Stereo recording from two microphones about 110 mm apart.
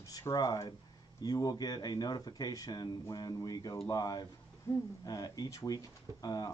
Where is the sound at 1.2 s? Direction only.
35° left (ahead or behind).